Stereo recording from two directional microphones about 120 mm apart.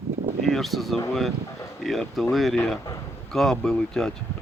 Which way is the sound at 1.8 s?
Centre (ahead or behind).